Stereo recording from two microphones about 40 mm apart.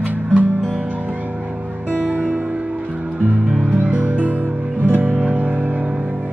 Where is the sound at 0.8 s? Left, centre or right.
Right.